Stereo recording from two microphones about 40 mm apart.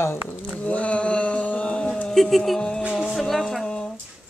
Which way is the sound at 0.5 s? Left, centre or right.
Left.